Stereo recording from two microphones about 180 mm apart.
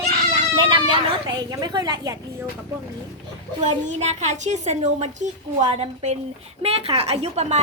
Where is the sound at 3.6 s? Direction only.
40° right (ahead or behind).